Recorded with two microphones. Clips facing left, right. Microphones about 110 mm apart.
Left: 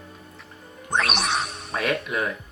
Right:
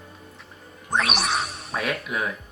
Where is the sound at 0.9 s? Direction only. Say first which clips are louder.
Even; centre (ahead or behind).